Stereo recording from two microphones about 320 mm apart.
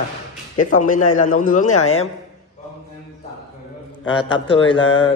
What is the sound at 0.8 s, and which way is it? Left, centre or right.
Speech, left.